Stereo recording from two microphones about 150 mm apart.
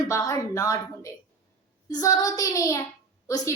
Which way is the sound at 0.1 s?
20° left (ahead or behind).